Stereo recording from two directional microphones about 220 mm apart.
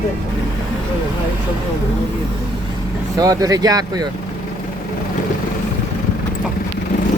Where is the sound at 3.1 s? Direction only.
15° right (ahead or behind).